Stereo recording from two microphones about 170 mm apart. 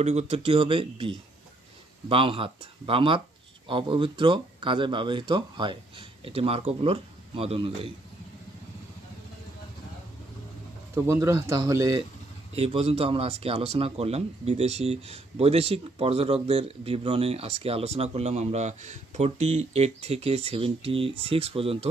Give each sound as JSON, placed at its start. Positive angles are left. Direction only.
{"t": 0.0, "sound": "speech", "side_deg": -40}
{"t": 11.0, "sound": "speech", "side_deg": -15}
{"t": 12.5, "sound": "speech", "side_deg": -35}